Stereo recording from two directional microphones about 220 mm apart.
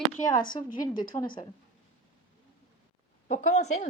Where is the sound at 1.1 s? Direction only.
10° left (ahead or behind).